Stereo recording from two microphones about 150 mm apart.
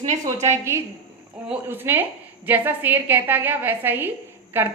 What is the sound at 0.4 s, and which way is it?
A woman's voice, 15° right (ahead or behind).